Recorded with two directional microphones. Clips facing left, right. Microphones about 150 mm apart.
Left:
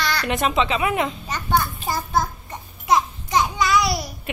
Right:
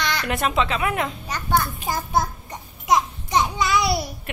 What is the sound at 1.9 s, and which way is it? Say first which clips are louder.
Babbling: even; 15° right (ahead or behind).